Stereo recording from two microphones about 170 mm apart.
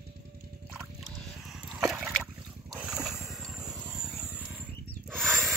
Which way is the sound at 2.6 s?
5° right (ahead or behind).